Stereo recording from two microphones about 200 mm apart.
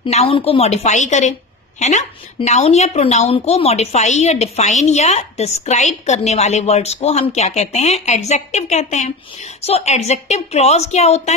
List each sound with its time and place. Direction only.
0.0 s a woman's voice: 30° left (ahead or behind)